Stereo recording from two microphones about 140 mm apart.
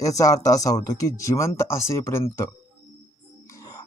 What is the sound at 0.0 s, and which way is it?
Speech, 25° left (ahead or behind).